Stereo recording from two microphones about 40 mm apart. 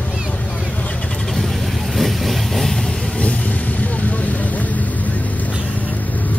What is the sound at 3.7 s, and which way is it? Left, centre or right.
Vehicle, left.